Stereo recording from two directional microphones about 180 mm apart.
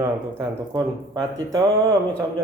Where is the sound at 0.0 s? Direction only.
20° right (ahead or behind).